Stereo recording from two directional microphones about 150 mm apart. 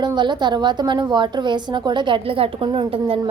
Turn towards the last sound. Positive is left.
turn(degrees=-35)  # may be behind; listen again after turning